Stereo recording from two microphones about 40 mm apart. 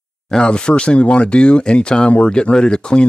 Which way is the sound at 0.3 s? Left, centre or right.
Left.